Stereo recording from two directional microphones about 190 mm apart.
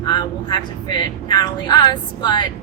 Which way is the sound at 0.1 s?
20° left (ahead or behind).